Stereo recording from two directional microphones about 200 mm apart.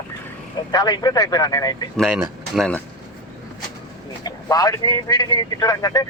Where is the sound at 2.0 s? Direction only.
Centre (ahead or behind).